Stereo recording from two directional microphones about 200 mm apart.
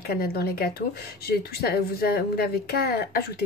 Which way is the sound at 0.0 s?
50° left (ahead or behind).